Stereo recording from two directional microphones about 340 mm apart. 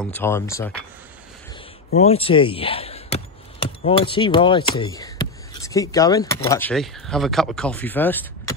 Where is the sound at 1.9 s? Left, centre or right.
Centre.